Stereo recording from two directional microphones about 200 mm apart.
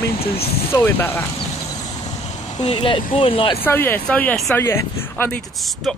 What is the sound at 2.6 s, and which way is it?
Speech, 25° left (ahead or behind).